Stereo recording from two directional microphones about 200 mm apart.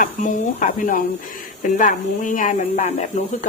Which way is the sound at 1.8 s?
40° left (ahead or behind).